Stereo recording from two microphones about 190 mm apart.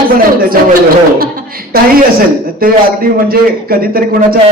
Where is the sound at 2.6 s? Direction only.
50° right (ahead or behind).